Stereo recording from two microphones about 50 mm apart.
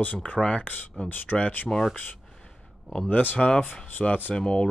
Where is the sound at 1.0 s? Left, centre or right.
Left.